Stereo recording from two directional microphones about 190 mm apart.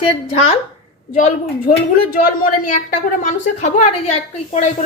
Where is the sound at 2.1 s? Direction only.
45° left (ahead or behind).